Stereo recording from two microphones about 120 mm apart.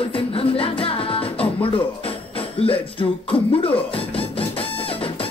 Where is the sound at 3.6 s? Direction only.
50° left (ahead or behind).